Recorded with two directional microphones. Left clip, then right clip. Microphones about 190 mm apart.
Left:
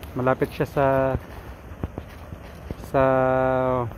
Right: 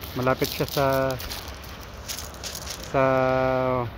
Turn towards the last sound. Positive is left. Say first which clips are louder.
# left 2 dB
turn(degrees=0)  # may be behind; listen again after turning